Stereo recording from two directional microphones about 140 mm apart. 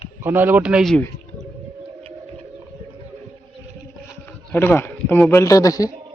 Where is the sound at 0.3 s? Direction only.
15° right (ahead or behind).